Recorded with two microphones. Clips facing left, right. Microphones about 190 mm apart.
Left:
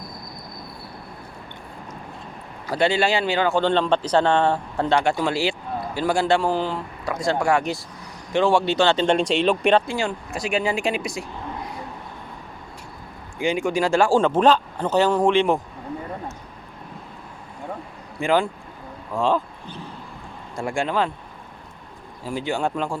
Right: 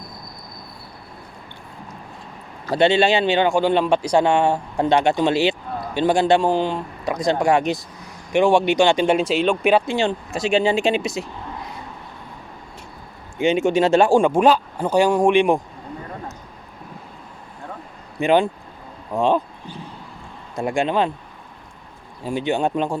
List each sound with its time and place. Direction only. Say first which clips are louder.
2.7 s speech: right 4 dB; 25° right (ahead or behind)
3.6 s speech: right 2 dB; 10° right (ahead or behind)
9.8 s speech: right 4 dB; 25° right (ahead or behind)
13.4 s speech: right 5 dB; 25° right (ahead or behind)
18.2 s speech: right 4 dB; 20° right (ahead or behind)
20.6 s speech: right 3 dB; 20° right (ahead or behind)
22.2 s speech: right 4 dB; 20° right (ahead or behind)